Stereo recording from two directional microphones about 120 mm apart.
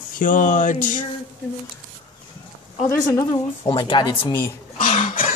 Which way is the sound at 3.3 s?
45° left (ahead or behind).